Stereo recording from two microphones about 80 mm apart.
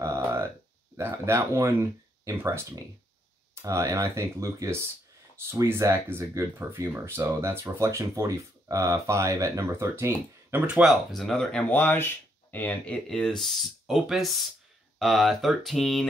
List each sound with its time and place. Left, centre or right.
0.0 s a sound: right
0.9 s speech: right
10.7 s speech: centre
11.7 s speech: left; by 16.1 s centre